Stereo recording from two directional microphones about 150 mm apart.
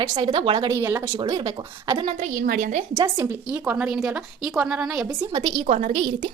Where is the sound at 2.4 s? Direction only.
80° right.